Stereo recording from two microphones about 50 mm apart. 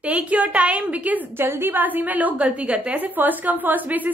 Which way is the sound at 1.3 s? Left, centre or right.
Right.